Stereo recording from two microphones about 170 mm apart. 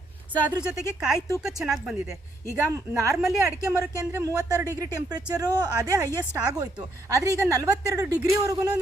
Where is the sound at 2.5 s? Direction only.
15° right (ahead or behind).